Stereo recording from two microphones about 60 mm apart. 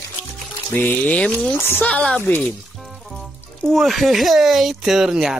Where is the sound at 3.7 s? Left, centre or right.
Centre.